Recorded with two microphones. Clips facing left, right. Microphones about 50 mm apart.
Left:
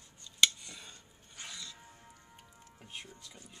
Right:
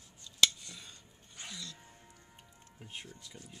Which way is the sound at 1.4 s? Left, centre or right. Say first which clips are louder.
Right 1 dB; centre.